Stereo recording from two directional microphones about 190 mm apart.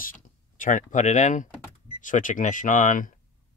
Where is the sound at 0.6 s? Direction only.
40° left (ahead or behind).